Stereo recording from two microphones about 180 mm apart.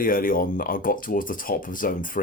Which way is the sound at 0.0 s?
50° left (ahead or behind).